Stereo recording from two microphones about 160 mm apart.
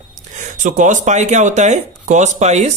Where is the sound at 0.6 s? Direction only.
50° right (ahead or behind).